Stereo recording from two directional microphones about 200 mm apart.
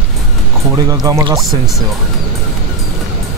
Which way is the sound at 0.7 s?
20° right (ahead or behind).